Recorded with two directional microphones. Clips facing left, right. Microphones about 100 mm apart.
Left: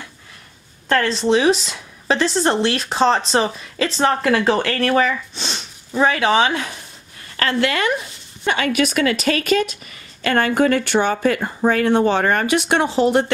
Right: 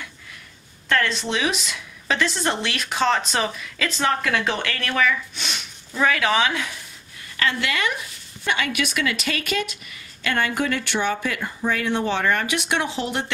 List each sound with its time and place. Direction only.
0.8 s a woman's voice: 35° left (ahead or behind)